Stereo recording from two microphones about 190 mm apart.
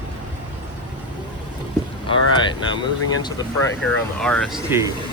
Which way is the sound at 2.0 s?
25° left (ahead or behind).